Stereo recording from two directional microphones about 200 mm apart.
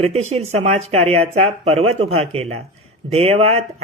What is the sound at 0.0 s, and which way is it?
Speech, 30° right (ahead or behind).